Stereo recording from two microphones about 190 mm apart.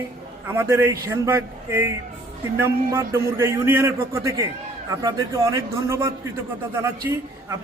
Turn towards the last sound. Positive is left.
turn(degrees=-15)  # may be behind; listen again after turning